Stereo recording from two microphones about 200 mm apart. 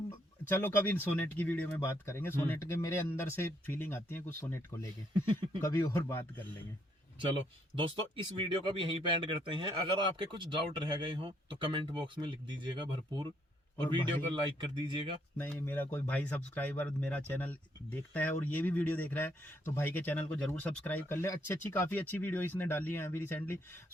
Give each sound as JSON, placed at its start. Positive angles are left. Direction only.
{"t": 0.4, "sound": "speech", "side_deg": 10}
{"t": 7.2, "sound": "speech", "side_deg": -25}
{"t": 14.8, "sound": "speech", "side_deg": -25}
{"t": 15.4, "sound": "speech", "side_deg": 10}